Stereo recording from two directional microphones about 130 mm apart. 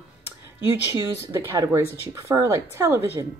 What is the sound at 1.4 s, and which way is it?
A woman's voice, 25° right (ahead or behind).